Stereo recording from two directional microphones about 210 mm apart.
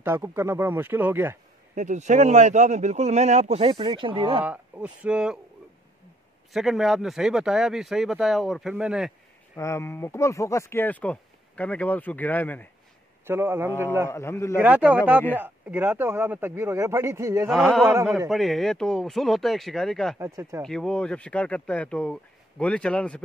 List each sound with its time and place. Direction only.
0.0 s speech: 10° right (ahead or behind)
1.8 s speech: 35° right (ahead or behind)
4.4 s speech: 5° right (ahead or behind)
6.5 s speech: centre (ahead or behind)
9.6 s speech: 10° left (ahead or behind)
13.3 s speech: 10° right (ahead or behind)
14.0 s speech: 10° left (ahead or behind)
14.6 s speech: 5° right (ahead or behind)
17.5 s speech: centre (ahead or behind)
20.2 s speech: 15° right (ahead or behind)
20.6 s speech: 5° left (ahead or behind)